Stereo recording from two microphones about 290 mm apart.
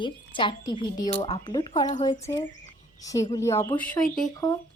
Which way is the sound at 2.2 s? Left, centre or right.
Centre.